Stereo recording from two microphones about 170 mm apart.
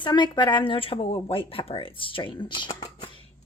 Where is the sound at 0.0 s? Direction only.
25° left (ahead or behind).